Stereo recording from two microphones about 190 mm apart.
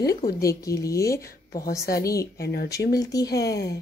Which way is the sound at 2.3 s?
55° left (ahead or behind).